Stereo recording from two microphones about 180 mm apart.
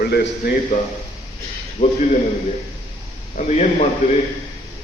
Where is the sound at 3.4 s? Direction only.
40° left (ahead or behind).